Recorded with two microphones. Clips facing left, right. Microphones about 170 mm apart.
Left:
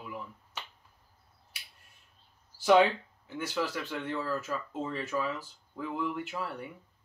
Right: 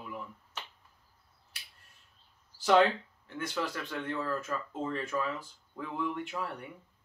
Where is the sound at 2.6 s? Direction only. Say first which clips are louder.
Left 2 dB; 10° left (ahead or behind).